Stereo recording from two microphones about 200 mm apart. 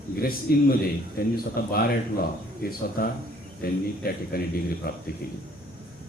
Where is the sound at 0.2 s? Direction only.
50° left (ahead or behind).